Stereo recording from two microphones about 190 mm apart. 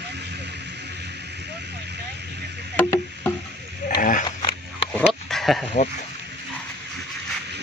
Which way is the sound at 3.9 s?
45° left (ahead or behind).